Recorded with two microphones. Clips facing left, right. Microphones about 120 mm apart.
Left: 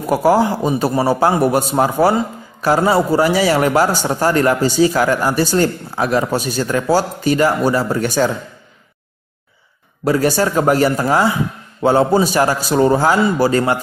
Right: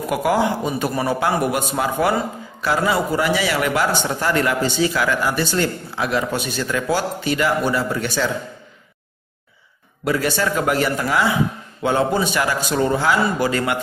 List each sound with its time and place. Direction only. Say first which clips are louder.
0.1 s a man's voice: left 5 dB; 35° left (ahead or behind)
10.0 s a man's voice: left 5 dB; 40° left (ahead or behind)